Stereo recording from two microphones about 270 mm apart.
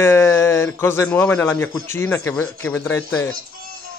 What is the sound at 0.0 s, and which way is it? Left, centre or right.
A man's voice, centre.